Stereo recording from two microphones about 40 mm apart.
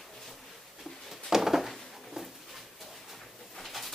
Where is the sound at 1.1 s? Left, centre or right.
Centre.